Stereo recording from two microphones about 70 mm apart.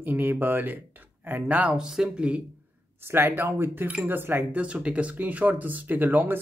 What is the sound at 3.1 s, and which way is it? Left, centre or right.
Speech, right.